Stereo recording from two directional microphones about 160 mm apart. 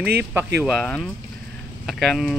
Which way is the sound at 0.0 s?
80° right.